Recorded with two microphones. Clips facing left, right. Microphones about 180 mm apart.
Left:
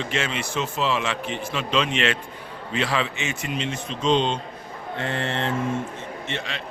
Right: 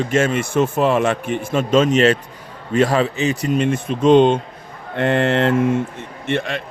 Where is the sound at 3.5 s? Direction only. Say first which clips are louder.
Right 10 dB; 50° right (ahead or behind).